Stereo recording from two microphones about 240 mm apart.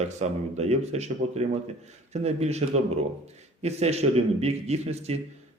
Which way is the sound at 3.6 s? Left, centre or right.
Right.